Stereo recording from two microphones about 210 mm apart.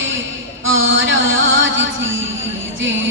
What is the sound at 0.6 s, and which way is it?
Music, 65° right (ahead or behind).